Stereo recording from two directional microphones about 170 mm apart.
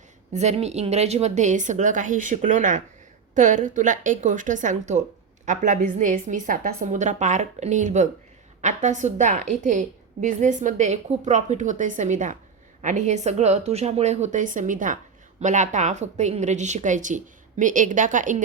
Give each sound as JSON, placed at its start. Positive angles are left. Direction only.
{"t": 0.3, "sound": "a woman's voice", "side_deg": -40}